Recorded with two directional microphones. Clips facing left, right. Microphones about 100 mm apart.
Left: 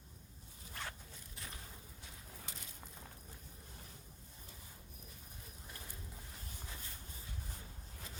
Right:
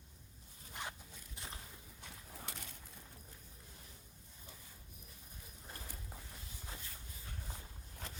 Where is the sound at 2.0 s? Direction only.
60° right (ahead or behind).